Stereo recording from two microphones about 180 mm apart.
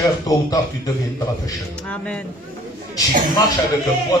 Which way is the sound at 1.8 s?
5° left (ahead or behind).